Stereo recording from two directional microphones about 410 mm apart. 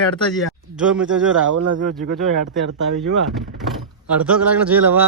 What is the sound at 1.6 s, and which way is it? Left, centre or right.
Speech, right.